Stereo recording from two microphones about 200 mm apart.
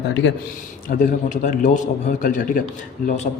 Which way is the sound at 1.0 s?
40° left (ahead or behind).